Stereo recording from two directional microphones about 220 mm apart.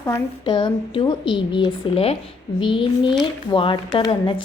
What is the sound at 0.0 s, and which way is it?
A woman's voice, 15° left (ahead or behind).